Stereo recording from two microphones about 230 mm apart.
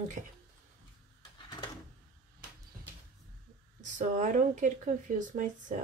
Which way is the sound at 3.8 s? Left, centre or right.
Right.